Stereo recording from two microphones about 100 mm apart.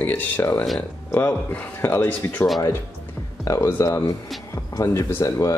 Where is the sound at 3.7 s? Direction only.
25° left (ahead or behind).